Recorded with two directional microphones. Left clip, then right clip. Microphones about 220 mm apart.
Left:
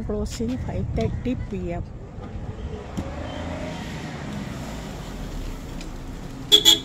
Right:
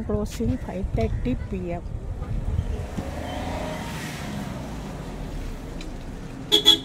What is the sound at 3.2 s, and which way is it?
Vehicle, 40° right (ahead or behind).